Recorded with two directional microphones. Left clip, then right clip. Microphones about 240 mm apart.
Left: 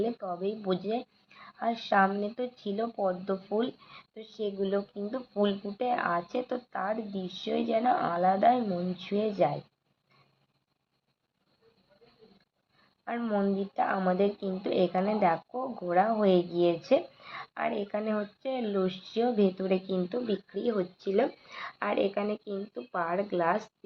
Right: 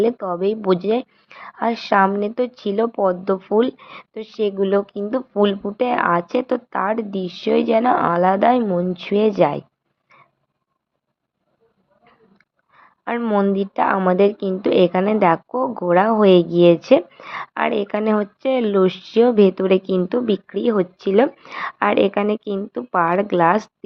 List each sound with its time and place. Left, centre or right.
0.0 s a woman's voice: right
13.1 s a woman's voice: right